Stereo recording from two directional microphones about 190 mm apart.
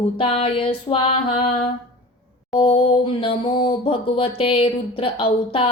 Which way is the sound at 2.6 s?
25° left (ahead or behind).